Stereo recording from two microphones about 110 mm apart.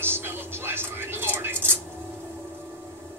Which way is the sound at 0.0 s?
20° right (ahead or behind).